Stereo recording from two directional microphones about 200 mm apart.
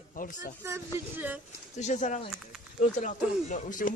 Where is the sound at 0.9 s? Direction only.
10° right (ahead or behind).